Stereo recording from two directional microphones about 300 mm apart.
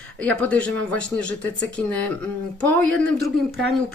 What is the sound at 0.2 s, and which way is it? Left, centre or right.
Speech, centre.